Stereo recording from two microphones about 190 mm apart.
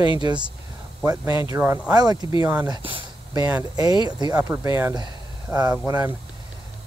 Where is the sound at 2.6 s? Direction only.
25° right (ahead or behind).